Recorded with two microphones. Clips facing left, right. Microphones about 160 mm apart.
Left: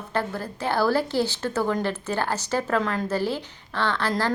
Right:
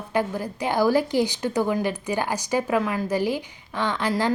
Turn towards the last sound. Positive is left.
turn(degrees=-15)  # may be behind; listen again after turning